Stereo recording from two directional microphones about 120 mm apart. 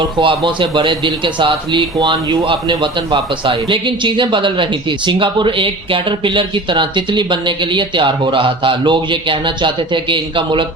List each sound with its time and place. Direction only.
0.0 s a man's voice: 45° right (ahead or behind)